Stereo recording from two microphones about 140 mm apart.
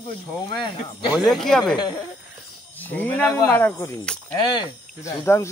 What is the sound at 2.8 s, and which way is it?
Speech, 10° left (ahead or behind).